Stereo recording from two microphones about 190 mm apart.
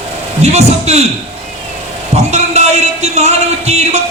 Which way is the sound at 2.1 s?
35° right (ahead or behind).